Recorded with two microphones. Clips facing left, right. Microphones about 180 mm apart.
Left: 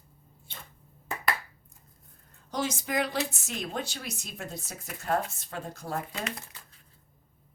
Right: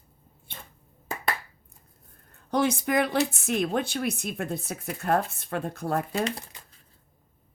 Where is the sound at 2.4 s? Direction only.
60° right (ahead or behind).